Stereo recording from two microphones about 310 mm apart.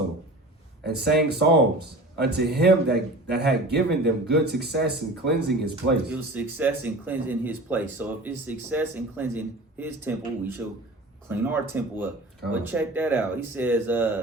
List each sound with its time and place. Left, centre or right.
0.9 s speech: right
6.1 s speech: centre
11.3 s speech: centre